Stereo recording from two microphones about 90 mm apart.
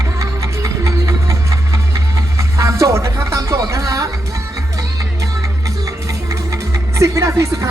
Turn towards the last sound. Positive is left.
turn(degrees=-35)  # may be behind; listen again after turning